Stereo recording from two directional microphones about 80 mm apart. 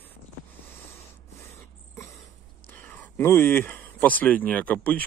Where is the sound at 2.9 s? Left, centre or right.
Left.